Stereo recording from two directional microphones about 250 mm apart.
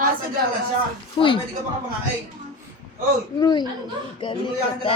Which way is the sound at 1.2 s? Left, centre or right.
Centre.